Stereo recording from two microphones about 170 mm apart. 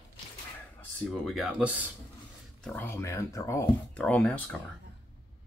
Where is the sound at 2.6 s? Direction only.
10° left (ahead or behind).